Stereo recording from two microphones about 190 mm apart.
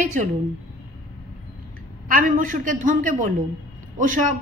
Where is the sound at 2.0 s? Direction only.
45° right (ahead or behind).